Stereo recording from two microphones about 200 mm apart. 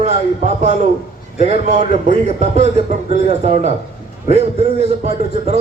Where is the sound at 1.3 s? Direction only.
30° right (ahead or behind).